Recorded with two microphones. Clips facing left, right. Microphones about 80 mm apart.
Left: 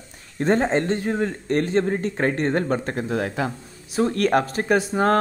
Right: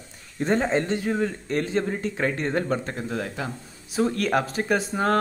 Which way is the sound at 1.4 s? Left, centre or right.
Left.